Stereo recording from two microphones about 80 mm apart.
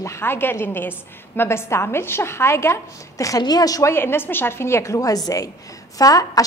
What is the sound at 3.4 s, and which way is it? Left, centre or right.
Speech, left.